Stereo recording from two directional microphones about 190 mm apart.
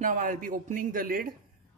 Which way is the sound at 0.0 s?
45° right (ahead or behind).